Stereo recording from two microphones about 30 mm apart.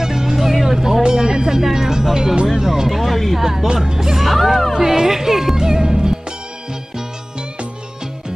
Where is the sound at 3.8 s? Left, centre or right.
Centre.